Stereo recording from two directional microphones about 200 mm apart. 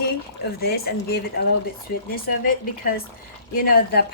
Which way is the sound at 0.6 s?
50° left (ahead or behind).